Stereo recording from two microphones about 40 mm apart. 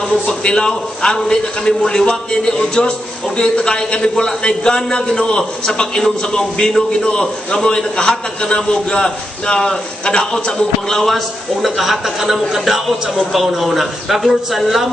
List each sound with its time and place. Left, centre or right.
0.4 s a man's voice: left
1.0 s a man's voice: centre
10.9 s a man's voice: centre
11.6 s a woman's voice: centre